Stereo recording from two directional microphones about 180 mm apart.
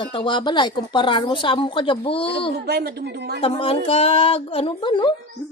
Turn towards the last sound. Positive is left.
turn(degrees=25)  # may be behind; listen again after turning